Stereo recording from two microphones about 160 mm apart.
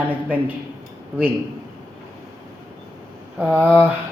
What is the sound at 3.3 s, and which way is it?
Speech, 10° right (ahead or behind).